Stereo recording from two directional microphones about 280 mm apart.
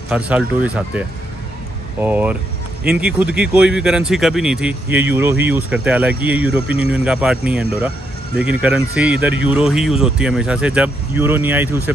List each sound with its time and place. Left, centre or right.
0.1 s speech: centre